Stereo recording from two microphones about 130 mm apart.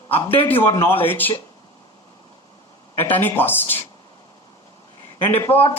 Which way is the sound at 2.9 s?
15° left (ahead or behind).